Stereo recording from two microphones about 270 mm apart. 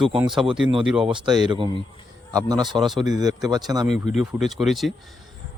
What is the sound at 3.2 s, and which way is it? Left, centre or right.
Speech, centre.